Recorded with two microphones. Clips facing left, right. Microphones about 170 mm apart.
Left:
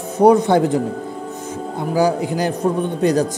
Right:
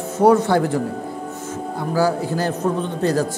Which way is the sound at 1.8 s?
15° left (ahead or behind).